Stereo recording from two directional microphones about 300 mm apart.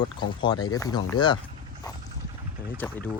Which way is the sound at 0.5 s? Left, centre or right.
Left.